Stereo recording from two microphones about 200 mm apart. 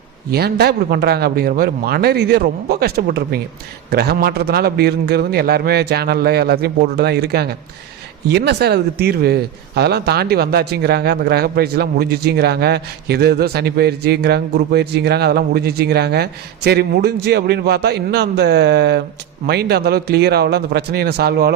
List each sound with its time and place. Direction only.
0.3 s speech: 50° right (ahead or behind)